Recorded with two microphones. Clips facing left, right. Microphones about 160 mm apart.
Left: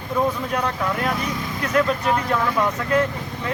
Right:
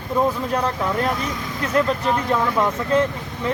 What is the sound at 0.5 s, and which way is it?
Speech, 30° right (ahead or behind).